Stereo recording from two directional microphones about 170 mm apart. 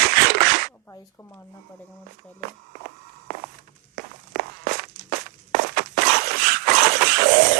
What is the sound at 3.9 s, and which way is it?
Walk, 60° right (ahead or behind).